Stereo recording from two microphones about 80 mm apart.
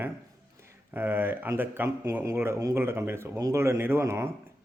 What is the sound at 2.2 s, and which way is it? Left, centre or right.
A man's voice, right.